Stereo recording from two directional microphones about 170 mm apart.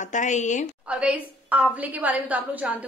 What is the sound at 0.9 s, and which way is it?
A woman's voice, 5° right (ahead or behind).